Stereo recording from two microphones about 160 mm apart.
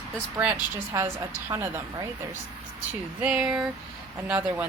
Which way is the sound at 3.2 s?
5° right (ahead or behind).